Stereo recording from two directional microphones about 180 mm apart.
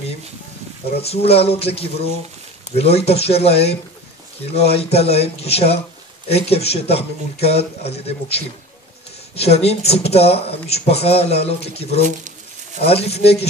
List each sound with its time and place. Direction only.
1.0 s speech: 35° left (ahead or behind)
4.7 s speech: 35° left (ahead or behind)